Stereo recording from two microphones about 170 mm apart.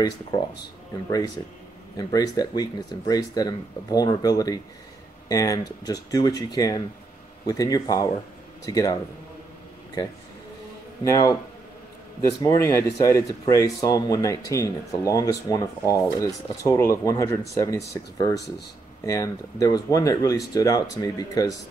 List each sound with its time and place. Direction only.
0.3 s speech: 20° left (ahead or behind)
2.0 s speech: 20° left (ahead or behind)
11.1 s speech: 20° left (ahead or behind)